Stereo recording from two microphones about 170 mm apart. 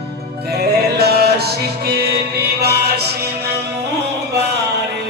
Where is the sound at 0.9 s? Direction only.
70° right (ahead or behind).